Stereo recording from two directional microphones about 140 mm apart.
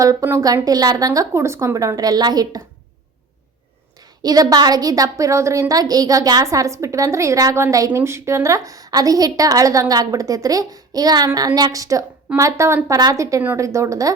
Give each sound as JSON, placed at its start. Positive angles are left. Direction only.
{"t": 0.0, "sound": "a woman's voice", "side_deg": -20}
{"t": 4.2, "sound": "a woman's voice", "side_deg": -25}